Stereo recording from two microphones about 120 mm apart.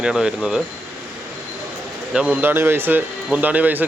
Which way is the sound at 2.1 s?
10° right (ahead or behind).